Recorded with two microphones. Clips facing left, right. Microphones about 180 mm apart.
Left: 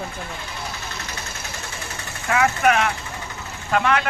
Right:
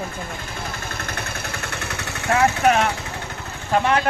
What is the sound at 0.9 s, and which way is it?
Vehicle, 55° right (ahead or behind).